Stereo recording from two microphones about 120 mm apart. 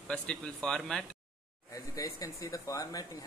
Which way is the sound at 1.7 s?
30° left (ahead or behind).